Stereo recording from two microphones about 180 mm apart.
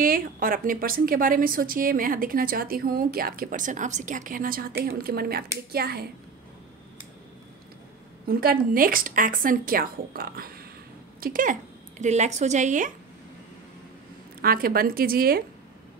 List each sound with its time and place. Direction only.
0.0 s a woman's voice: 50° right (ahead or behind)
8.3 s a woman's voice: 55° right (ahead or behind)
12.0 s a woman's voice: 40° right (ahead or behind)
14.4 s a woman's voice: 55° right (ahead or behind)